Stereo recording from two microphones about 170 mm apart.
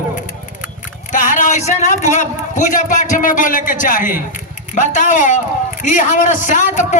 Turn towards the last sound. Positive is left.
turn(degrees=45)  # may be behind; listen again after turning